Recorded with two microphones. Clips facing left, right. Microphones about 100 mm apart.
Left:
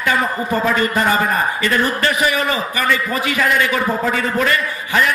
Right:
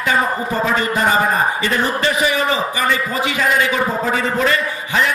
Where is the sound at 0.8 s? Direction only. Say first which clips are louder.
Even; 25° right (ahead or behind).